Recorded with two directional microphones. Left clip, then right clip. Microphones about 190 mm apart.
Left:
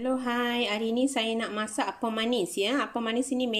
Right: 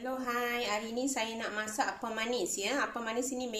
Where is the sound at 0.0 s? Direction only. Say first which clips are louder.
Left 6 dB; 50° left (ahead or behind).